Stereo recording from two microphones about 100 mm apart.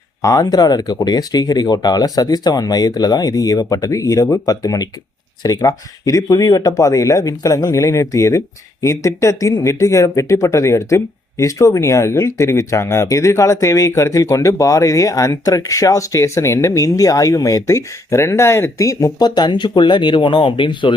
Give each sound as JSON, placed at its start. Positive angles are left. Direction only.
{"t": 0.2, "sound": "speech", "side_deg": 35}